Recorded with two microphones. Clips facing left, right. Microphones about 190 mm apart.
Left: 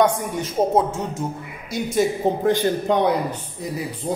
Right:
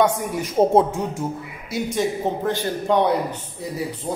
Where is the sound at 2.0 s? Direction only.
15° left (ahead or behind).